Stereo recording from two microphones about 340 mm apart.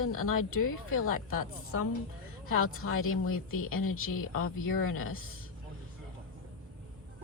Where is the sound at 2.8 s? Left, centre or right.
Left.